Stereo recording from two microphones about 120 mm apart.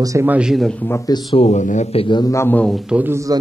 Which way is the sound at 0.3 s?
5° right (ahead or behind).